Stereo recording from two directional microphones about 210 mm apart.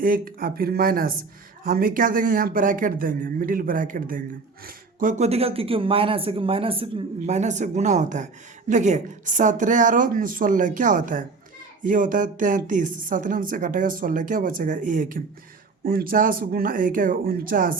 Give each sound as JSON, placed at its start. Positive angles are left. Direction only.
{"t": 0.0, "sound": "a woman's voice", "side_deg": -45}